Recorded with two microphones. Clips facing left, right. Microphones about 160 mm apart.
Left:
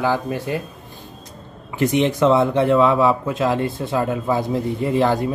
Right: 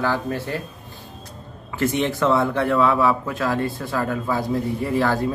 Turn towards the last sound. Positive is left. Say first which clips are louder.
# left 3 dB
turn(degrees=20)  # may be behind; listen again after turning